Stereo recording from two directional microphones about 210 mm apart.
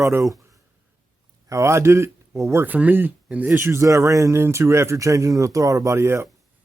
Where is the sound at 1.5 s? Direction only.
15° right (ahead or behind).